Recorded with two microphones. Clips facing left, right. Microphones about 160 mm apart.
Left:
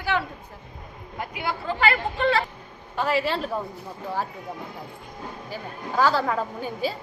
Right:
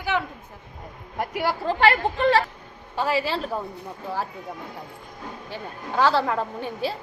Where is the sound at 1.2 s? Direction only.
40° right (ahead or behind).